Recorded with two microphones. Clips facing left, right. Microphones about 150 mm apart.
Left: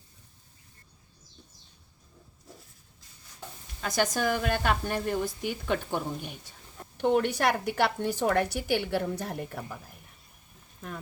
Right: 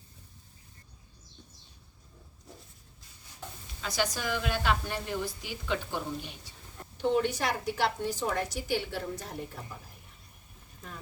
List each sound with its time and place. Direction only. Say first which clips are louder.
3.8 s a woman's voice: left 5 dB; 50° left (ahead or behind)